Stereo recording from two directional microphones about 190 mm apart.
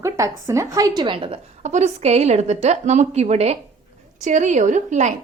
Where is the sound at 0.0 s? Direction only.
15° right (ahead or behind); by 5.1 s 40° right (ahead or behind).